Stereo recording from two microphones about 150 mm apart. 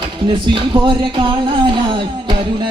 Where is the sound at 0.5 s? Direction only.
35° right (ahead or behind).